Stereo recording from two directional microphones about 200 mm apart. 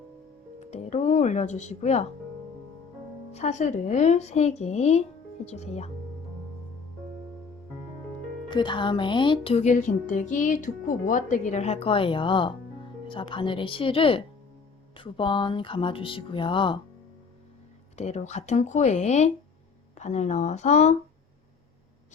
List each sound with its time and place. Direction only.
0.6 s speech: 35° left (ahead or behind)
3.3 s speech: 35° left (ahead or behind)
8.4 s speech: 25° left (ahead or behind)
17.9 s speech: 35° left (ahead or behind)